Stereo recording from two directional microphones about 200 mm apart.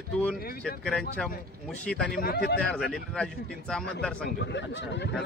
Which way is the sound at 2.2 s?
50° left (ahead or behind).